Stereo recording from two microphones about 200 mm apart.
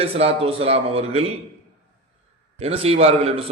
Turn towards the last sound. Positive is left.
turn(degrees=-30)  # may be behind; listen again after turning